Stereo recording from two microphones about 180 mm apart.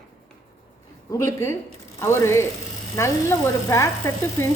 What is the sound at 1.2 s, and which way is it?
A woman's voice, 15° left (ahead or behind).